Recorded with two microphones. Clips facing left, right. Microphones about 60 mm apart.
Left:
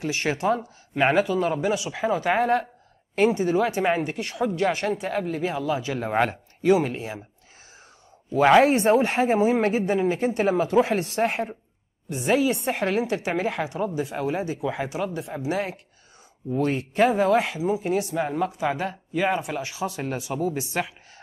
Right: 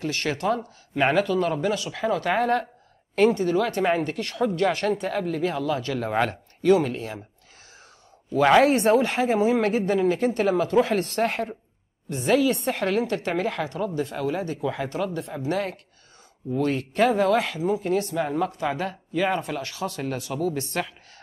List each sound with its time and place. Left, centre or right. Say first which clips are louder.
0.0 s speech: left 1 dB; centre
8.6 s speech: even; left